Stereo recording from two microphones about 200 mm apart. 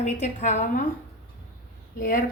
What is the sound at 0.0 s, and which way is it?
Speech, 35° left (ahead or behind).